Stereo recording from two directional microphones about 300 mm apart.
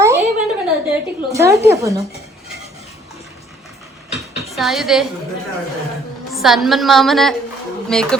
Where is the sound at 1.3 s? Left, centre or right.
Centre.